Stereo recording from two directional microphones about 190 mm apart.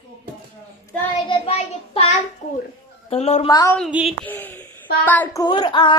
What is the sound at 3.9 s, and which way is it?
Speech, 5° right (ahead or behind).